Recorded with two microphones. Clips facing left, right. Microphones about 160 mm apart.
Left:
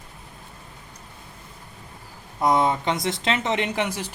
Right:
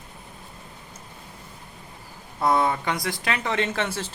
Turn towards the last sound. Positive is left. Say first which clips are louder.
# left 1 dB
turn(degrees=15)  # may be behind; listen again after turning